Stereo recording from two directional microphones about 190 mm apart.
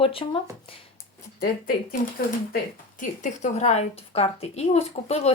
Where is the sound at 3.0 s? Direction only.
40° left (ahead or behind).